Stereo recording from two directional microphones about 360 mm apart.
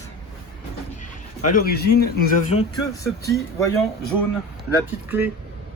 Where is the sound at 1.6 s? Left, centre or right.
Left.